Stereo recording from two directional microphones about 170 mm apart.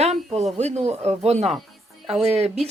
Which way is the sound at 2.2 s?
35° right (ahead or behind).